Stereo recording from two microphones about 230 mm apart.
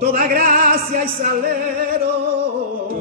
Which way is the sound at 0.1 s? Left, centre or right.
Right.